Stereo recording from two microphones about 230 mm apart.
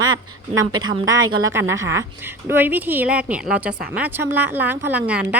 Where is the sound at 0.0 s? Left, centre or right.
Centre.